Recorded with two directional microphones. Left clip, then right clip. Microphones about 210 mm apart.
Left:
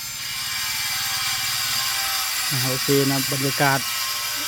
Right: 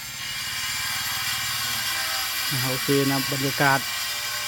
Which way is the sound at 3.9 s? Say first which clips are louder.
Left 2 dB; 50° left (ahead or behind).